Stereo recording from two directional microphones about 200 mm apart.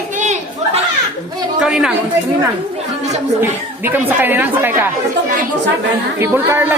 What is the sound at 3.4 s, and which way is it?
Speech, 10° right (ahead or behind).